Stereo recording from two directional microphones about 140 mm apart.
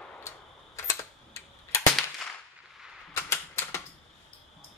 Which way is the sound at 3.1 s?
15° left (ahead or behind).